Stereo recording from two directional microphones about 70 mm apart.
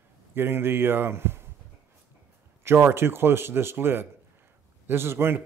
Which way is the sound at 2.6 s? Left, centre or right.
Right.